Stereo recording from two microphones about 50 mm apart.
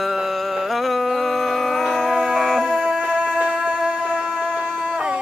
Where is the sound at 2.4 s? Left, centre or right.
Centre.